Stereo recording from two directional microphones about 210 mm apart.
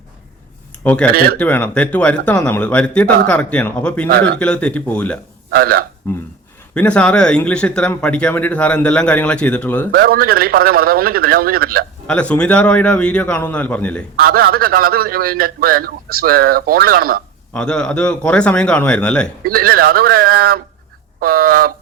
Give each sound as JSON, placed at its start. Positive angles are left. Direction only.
{"t": 1.0, "sound": "speech", "side_deg": 5}
{"t": 5.5, "sound": "a man's voice", "side_deg": -45}
{"t": 6.0, "sound": "speech", "side_deg": 10}
{"t": 9.9, "sound": "a man's voice", "side_deg": -45}
{"t": 12.0, "sound": "speech", "side_deg": 5}
{"t": 14.2, "sound": "a man's voice", "side_deg": -45}
{"t": 17.5, "sound": "speech", "side_deg": 5}
{"t": 19.5, "sound": "a man's voice", "side_deg": -45}